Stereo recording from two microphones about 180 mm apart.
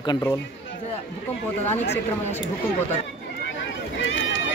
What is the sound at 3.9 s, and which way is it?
Run, 90° left.